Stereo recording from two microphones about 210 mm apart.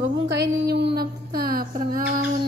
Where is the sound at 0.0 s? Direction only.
55° right (ahead or behind).